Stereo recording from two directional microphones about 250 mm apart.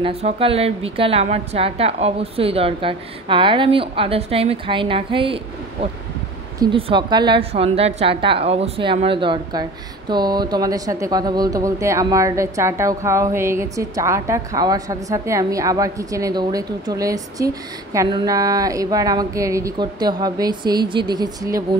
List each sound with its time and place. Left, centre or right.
0.0 s a woman's voice: right